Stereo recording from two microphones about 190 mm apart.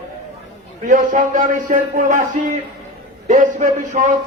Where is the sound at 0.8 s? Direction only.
45° right (ahead or behind).